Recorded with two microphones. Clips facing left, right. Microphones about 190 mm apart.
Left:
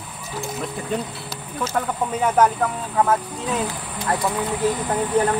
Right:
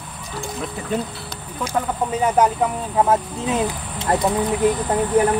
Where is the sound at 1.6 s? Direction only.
15° right (ahead or behind).